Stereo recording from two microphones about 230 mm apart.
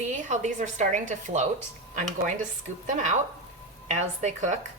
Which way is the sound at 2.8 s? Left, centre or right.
Right.